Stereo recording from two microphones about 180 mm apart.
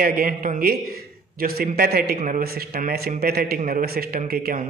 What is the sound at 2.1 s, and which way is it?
A man's voice, 45° right (ahead or behind).